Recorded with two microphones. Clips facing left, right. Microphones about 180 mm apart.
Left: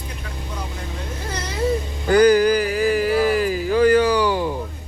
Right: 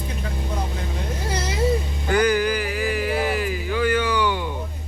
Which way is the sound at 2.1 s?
35° left (ahead or behind).